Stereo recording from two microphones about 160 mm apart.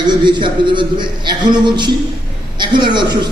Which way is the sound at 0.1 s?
30° right (ahead or behind).